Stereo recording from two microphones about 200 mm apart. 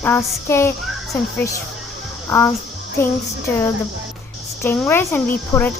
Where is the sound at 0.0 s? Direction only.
10° left (ahead or behind).